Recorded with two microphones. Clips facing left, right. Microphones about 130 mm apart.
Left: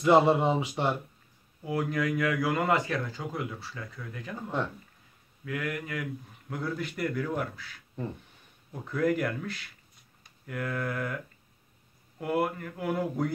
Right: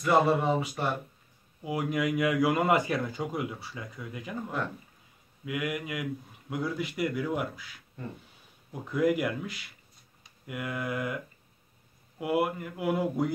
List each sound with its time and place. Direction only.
0.0 s speech: 25° left (ahead or behind)
1.6 s speech: 15° right (ahead or behind)
5.4 s speech: 15° right (ahead or behind)
8.8 s speech: 10° right (ahead or behind)